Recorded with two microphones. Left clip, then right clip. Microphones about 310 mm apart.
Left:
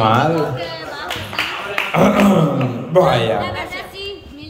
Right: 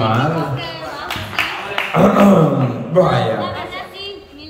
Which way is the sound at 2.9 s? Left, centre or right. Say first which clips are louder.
Left 1 dB; centre.